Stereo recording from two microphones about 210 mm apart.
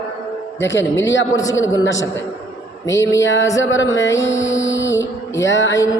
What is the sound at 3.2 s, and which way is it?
Speech, 60° left (ahead or behind).